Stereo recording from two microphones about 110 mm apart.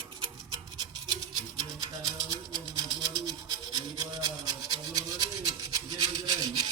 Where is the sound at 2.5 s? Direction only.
40° right (ahead or behind).